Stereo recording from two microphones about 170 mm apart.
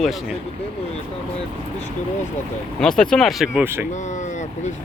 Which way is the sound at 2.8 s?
5° left (ahead or behind).